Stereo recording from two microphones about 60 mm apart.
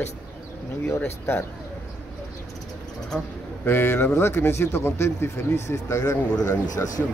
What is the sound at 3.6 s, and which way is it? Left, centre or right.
A man's voice, left.